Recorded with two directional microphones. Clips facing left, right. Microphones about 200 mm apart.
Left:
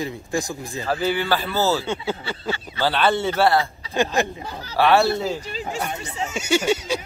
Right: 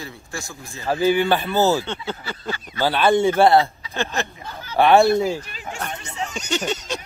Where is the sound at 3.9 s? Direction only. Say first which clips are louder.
Left 5 dB; 15° left (ahead or behind).